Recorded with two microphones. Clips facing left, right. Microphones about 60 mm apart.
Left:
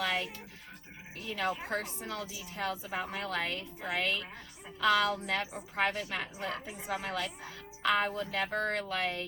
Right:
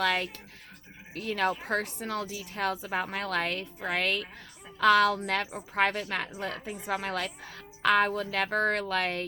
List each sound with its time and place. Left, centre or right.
0.0 s a woman's voice: right